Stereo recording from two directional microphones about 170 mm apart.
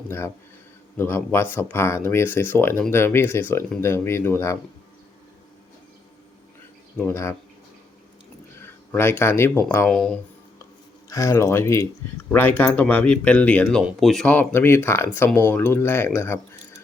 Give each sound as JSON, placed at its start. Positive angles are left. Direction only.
{"t": 0.9, "sound": "speech", "side_deg": 10}
{"t": 6.9, "sound": "speech", "side_deg": 10}
{"t": 8.6, "sound": "speech", "side_deg": 15}
{"t": 11.1, "sound": "speech", "side_deg": 15}